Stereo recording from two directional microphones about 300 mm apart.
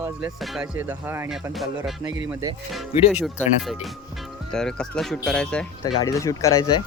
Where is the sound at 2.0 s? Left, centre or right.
Centre.